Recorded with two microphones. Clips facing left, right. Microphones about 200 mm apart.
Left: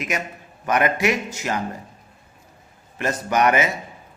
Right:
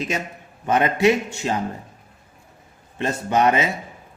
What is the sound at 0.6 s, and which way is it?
A man's voice, 25° right (ahead or behind).